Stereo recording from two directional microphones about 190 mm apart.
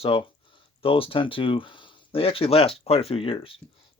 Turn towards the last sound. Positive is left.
turn(degrees=30)  # may be behind; listen again after turning